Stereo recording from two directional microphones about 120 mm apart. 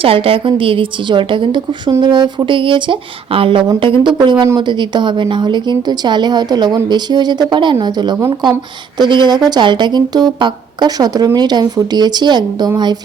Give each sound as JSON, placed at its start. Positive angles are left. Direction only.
{"t": 0.0, "sound": "a woman's voice", "side_deg": -50}